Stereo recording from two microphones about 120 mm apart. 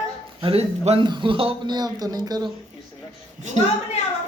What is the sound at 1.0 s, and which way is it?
Speech, 40° right (ahead or behind).